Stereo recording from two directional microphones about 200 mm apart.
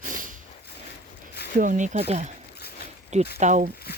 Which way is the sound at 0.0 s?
40° right (ahead or behind).